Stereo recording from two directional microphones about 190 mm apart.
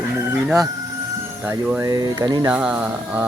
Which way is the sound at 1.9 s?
20° right (ahead or behind).